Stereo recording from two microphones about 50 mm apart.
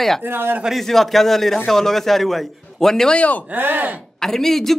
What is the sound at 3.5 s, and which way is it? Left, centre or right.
Speech, right.